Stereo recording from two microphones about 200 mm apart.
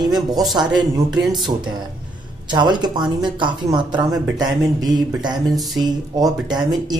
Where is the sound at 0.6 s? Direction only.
20° right (ahead or behind).